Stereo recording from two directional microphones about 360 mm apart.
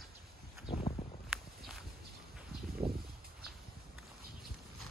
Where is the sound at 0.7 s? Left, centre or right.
Centre.